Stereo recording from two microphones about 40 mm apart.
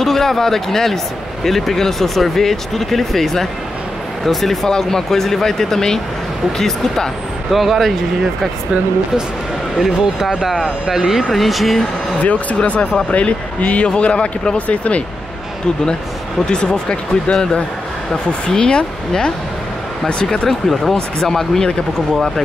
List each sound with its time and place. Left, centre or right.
0.0 s speech: centre
7.5 s speech: centre
9.8 s speech: centre
11.2 s speech: centre
12.2 s speech: left
16.4 s speech: centre
20.4 s speech: centre